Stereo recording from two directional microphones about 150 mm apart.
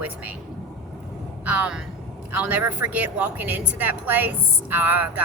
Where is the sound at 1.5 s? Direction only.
10° right (ahead or behind).